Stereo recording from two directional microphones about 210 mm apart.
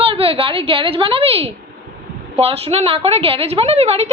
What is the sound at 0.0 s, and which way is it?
A woman's voice, 25° right (ahead or behind).